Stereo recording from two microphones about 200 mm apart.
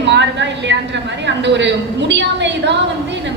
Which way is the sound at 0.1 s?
60° right (ahead or behind).